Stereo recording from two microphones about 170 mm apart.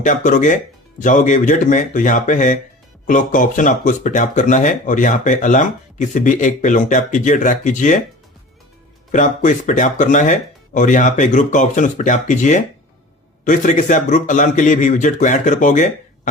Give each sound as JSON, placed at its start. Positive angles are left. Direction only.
{"t": 0.0, "sound": "speech", "side_deg": 50}
{"t": 9.1, "sound": "speech", "side_deg": 45}